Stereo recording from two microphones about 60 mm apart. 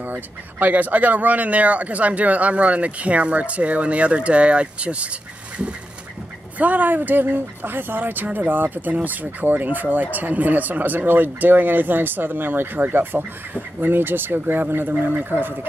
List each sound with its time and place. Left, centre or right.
0.0 s speech: right
6.6 s speech: right